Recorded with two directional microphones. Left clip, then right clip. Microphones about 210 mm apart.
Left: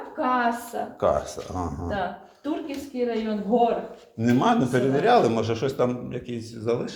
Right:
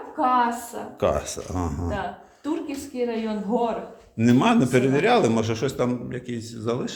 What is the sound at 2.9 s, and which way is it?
Speech, 35° right (ahead or behind).